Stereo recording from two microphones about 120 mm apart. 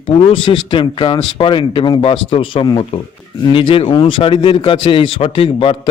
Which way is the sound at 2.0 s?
50° left (ahead or behind).